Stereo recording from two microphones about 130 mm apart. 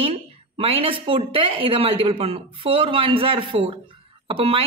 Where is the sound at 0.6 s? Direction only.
45° right (ahead or behind).